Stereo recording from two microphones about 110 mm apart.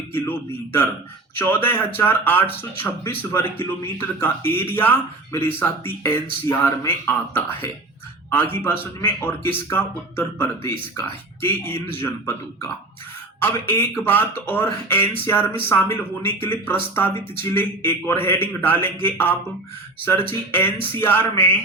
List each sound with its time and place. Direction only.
0.1 s speech: 20° left (ahead or behind)